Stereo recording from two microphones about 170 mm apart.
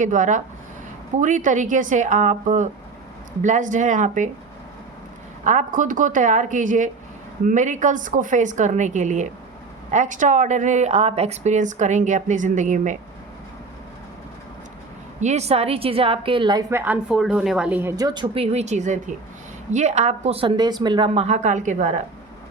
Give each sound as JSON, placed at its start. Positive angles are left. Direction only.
{"t": 0.0, "sound": "a woman's voice", "side_deg": -50}
{"t": 5.5, "sound": "a woman's voice", "side_deg": -45}
{"t": 15.2, "sound": "a woman's voice", "side_deg": -40}
{"t": 17.9, "sound": "a woman's voice", "side_deg": -25}
{"t": 18.5, "sound": "a woman's voice", "side_deg": -40}